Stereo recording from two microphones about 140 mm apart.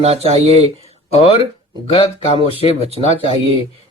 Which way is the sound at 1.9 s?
45° left (ahead or behind).